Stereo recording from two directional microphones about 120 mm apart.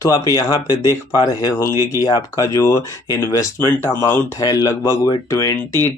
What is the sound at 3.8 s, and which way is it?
Speech, 20° left (ahead or behind).